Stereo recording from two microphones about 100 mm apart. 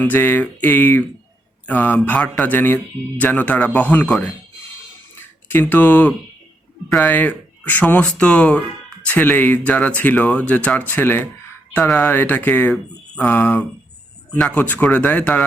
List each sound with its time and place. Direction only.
0.0 s a sound: 20° left (ahead or behind)
1.6 s speech: 15° left (ahead or behind)
12.0 s a sound: 20° left (ahead or behind)
13.1 s speech: 20° left (ahead or behind)
14.3 s speech: 5° left (ahead or behind)
14.6 s speech: 20° left (ahead or behind)